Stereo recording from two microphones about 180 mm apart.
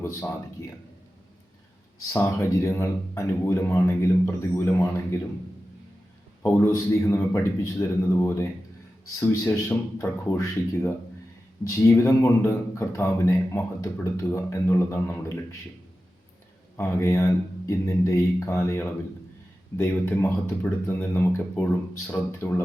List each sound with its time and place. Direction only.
0.0 s a man's voice: 15° left (ahead or behind)
2.1 s speech: 15° left (ahead or behind)
6.4 s speech: 15° left (ahead or behind)
16.7 s speech: 15° left (ahead or behind)